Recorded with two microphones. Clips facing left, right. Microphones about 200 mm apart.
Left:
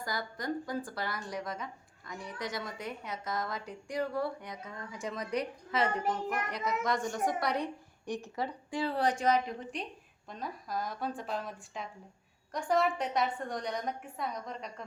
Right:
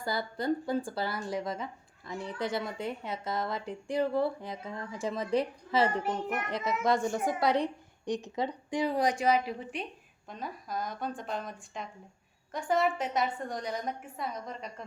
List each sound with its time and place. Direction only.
0.0 s a woman's voice: 30° right (ahead or behind); by 14.8 s centre (ahead or behind)